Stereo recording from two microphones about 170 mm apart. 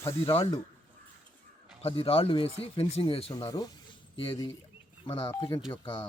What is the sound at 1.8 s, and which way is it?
Speech, 35° left (ahead or behind).